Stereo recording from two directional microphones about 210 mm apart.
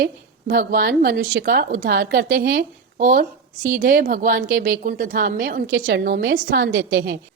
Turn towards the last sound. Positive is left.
turn(degrees=-50)  # may be behind; listen again after turning